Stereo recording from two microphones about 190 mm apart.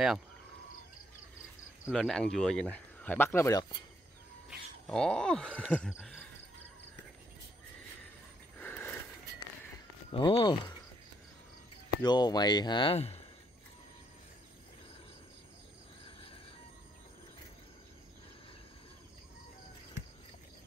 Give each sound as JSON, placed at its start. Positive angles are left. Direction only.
{"t": 1.9, "sound": "speech", "side_deg": 0}
{"t": 4.5, "sound": "speech", "side_deg": 0}
{"t": 8.5, "sound": "a sound", "side_deg": 10}
{"t": 10.1, "sound": "speech", "side_deg": 25}
{"t": 12.0, "sound": "speech", "side_deg": 20}